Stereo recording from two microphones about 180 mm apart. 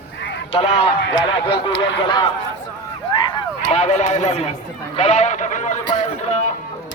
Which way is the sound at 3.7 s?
40° left (ahead or behind).